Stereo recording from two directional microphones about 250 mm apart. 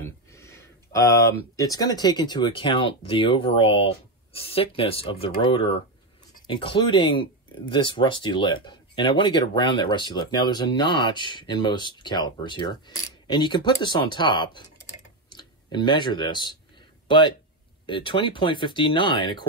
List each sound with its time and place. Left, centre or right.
0.0 s speech: centre
17.8 s speech: centre